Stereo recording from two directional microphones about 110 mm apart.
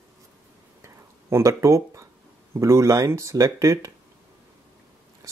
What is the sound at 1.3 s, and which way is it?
Speech, 25° right (ahead or behind).